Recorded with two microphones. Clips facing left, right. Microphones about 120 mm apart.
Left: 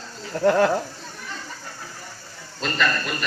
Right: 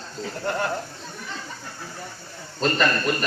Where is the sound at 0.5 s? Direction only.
90° left.